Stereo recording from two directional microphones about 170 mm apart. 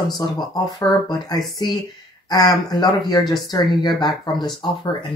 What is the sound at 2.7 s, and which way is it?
Speech, 25° left (ahead or behind).